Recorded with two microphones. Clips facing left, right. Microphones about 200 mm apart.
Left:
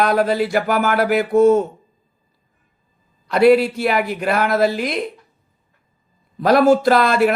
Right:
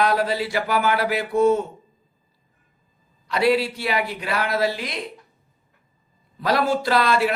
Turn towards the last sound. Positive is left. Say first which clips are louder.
# left 5 dB
turn(degrees=50)  # may be behind; listen again after turning